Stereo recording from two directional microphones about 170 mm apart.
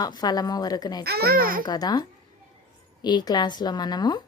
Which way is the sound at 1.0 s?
70° right (ahead or behind).